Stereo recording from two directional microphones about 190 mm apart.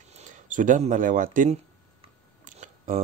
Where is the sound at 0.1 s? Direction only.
40° right (ahead or behind).